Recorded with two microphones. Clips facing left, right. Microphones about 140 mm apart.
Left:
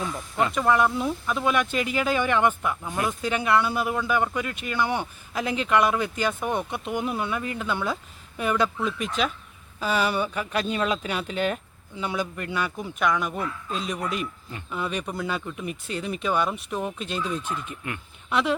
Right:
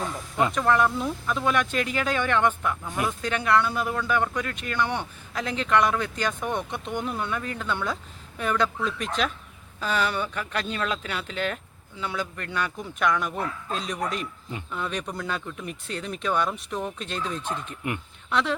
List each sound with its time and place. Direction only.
0.5 s speech: 5° left (ahead or behind)
17.8 s speech: 20° right (ahead or behind)
18.3 s a woman's voice: 10° left (ahead or behind)